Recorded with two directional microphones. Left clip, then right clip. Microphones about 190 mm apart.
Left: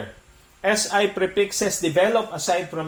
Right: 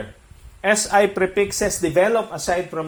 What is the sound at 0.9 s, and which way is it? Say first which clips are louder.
Speech: right 4 dB; 45° right (ahead or behind).